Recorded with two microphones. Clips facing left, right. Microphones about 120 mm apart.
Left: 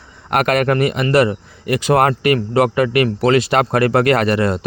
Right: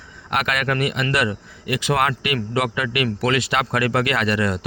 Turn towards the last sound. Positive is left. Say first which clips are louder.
# left 5 dB
turn(degrees=35)  # may be behind; listen again after turning